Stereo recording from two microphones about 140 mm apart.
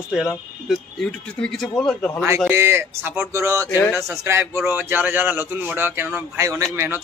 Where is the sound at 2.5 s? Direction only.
15° right (ahead or behind).